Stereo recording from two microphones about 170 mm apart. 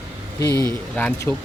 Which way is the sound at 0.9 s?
10° left (ahead or behind).